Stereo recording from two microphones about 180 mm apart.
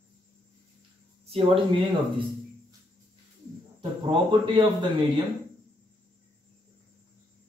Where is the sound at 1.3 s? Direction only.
30° right (ahead or behind).